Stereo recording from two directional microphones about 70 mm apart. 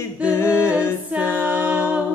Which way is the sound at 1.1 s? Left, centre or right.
Right.